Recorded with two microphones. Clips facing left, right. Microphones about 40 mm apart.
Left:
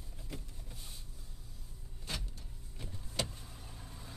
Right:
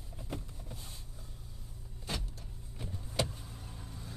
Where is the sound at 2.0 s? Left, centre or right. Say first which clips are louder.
Right 3 dB; centre.